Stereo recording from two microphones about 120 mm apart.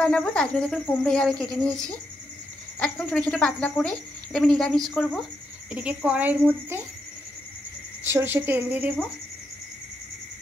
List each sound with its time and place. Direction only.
0.0 s speech: 10° left (ahead or behind)
5.7 s speech: 10° right (ahead or behind)
8.0 s speech: 20° right (ahead or behind)